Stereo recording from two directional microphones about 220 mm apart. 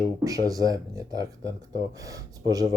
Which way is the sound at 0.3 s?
15° right (ahead or behind).